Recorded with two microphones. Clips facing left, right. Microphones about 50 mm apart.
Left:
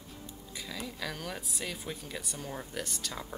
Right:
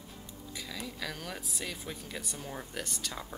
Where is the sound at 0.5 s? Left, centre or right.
Centre.